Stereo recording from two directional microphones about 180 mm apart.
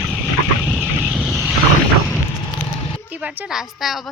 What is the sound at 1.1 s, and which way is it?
Vehicle, centre (ahead or behind).